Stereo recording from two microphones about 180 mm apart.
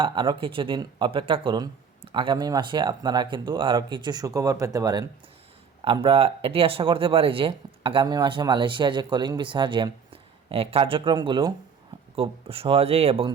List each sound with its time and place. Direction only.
0.0 s speech: 25° right (ahead or behind)